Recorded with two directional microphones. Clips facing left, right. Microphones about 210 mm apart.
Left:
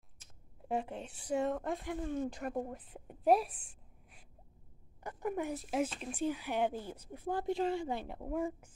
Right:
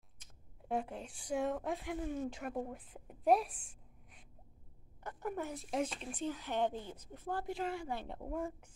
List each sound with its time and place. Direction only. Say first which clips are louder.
0.2 s speech: left 3 dB; 5° left (ahead or behind)
5.0 s speech: left 4 dB; 10° left (ahead or behind)
7.5 s a woman's voice: left 5 dB; 25° left (ahead or behind)
8.0 s speech: left 4 dB; 5° left (ahead or behind)